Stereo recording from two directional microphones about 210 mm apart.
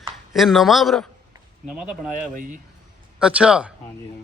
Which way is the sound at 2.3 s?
40° right (ahead or behind).